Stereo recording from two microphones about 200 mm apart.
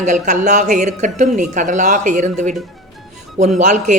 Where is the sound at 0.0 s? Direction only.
40° right (ahead or behind).